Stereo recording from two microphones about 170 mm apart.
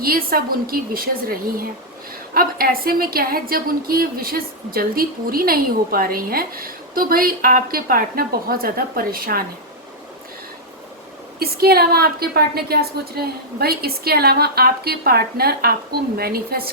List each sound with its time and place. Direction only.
0.0 s a woman's voice: 60° right (ahead or behind)
11.3 s a woman's voice: 65° right (ahead or behind)